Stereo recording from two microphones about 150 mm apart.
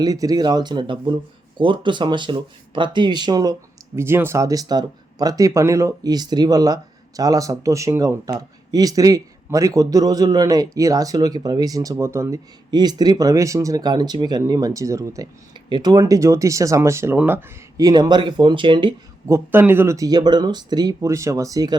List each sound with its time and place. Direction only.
0.0 s speech: 25° right (ahead or behind)
3.9 s speech: 15° right (ahead or behind)
17.7 s speech: 25° right (ahead or behind)
19.3 s speech: 15° right (ahead or behind)